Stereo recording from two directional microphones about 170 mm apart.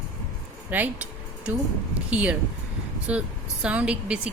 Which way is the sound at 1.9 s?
5° right (ahead or behind).